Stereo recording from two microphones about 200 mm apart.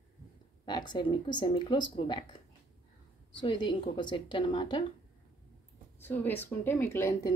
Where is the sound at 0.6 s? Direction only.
20° left (ahead or behind).